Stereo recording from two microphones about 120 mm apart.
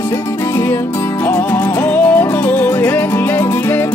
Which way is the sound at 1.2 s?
15° left (ahead or behind).